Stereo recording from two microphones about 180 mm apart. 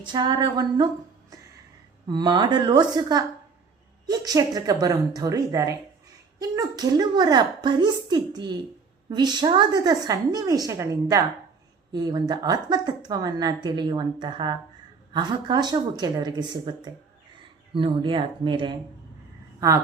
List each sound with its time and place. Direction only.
0.0 s a woman's voice: 25° right (ahead or behind)
2.0 s a woman's voice: 25° right (ahead or behind)